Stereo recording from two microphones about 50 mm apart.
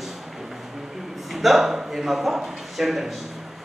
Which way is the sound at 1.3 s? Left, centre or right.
Centre.